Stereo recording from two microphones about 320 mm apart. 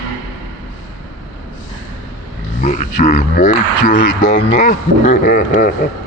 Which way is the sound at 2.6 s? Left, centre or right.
Left.